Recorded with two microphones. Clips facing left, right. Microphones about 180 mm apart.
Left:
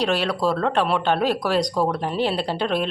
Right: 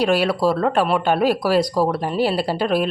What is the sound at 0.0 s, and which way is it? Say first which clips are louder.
Speech: right 4 dB; 10° right (ahead or behind).